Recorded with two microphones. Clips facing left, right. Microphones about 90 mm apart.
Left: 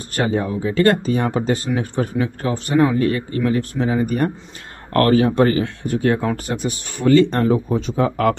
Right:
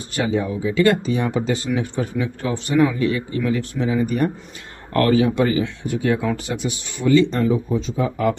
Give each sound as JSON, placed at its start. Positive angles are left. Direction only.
{"t": 0.1, "sound": "speech", "side_deg": 45}